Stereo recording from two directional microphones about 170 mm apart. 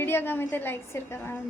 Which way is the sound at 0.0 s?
15° left (ahead or behind).